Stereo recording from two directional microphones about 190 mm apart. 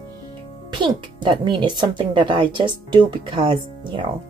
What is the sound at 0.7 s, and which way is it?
Speech, 25° right (ahead or behind).